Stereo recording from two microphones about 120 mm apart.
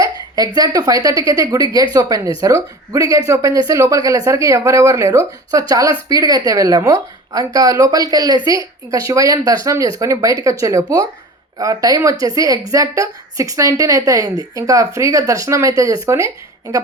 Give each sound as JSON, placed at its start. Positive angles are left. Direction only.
{"t": 0.0, "sound": "a woman's voice", "side_deg": -30}